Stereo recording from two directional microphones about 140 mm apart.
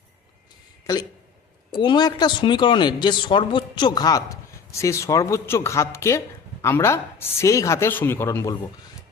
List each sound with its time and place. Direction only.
1.7 s speech: 30° left (ahead or behind)